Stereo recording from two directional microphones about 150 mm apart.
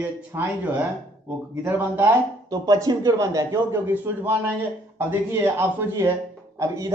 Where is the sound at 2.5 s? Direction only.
25° right (ahead or behind).